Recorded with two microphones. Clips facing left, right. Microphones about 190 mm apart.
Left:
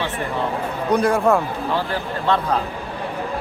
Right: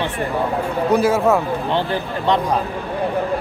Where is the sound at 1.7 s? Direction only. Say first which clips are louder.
Even; 20° right (ahead or behind).